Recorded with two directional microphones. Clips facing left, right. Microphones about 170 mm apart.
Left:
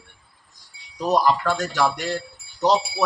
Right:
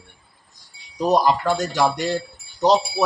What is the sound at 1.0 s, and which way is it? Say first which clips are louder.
A man's voice: right 2 dB; 20° right (ahead or behind).